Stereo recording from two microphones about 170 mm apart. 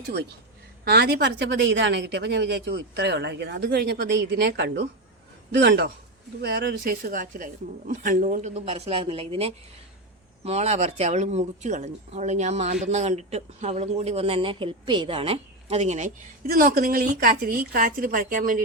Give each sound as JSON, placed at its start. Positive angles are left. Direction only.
{"t": 0.9, "sound": "speech", "side_deg": -70}
{"t": 16.5, "sound": "speech", "side_deg": -60}